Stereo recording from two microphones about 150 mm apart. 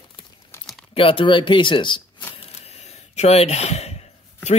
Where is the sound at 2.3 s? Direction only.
45° left (ahead or behind).